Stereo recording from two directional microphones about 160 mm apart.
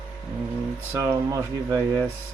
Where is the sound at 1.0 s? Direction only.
15° right (ahead or behind).